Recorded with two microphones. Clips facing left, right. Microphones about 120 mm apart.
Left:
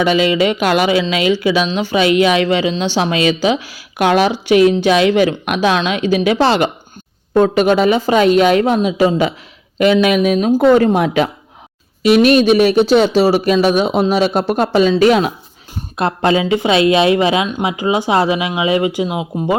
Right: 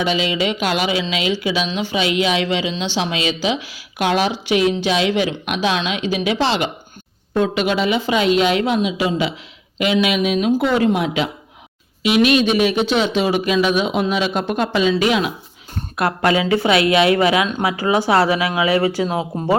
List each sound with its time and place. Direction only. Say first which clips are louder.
0.0 s a woman's voice: left 6 dB; 50° left (ahead or behind)
16.0 s speech: left 3 dB; 25° left (ahead or behind)